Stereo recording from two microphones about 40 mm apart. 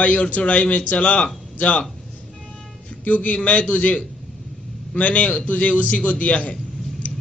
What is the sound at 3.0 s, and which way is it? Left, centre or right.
Speech, left.